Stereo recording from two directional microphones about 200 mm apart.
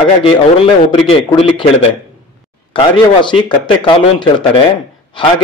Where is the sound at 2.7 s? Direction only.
25° left (ahead or behind).